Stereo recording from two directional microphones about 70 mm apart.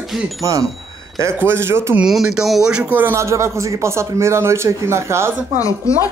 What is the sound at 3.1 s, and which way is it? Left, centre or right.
Speech, right.